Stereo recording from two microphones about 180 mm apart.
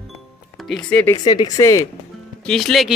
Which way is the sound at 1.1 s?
20° left (ahead or behind).